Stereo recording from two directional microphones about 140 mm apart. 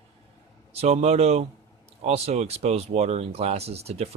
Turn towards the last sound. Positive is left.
turn(degrees=-45)  # may be behind; listen again after turning